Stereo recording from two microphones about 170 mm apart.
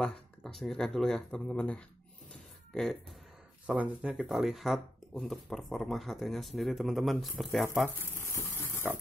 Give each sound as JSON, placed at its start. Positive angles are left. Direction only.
{"t": 0.0, "sound": "speech", "side_deg": 0}
{"t": 8.0, "sound": "pig", "side_deg": 15}